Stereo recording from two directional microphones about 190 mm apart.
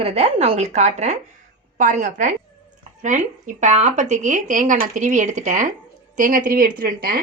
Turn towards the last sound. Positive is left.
turn(degrees=-50)  # may be behind; listen again after turning